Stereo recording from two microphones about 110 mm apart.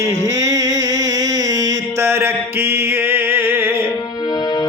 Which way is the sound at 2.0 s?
20° right (ahead or behind).